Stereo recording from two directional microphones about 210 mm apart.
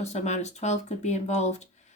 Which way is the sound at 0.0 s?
35° left (ahead or behind).